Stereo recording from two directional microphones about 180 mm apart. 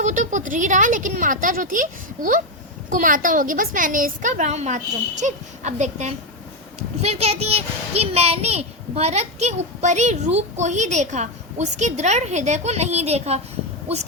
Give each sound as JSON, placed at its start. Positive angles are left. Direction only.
{"t": 0.0, "sound": "a child's voice", "side_deg": -45}